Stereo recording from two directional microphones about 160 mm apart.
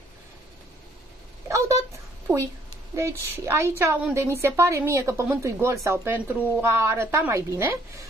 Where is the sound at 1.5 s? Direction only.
20° right (ahead or behind).